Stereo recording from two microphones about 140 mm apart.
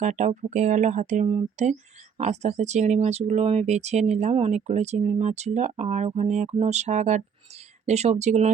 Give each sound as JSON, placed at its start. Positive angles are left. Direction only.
{"t": 0.0, "sound": "speech", "side_deg": -60}
{"t": 1.3, "sound": "speech", "side_deg": -50}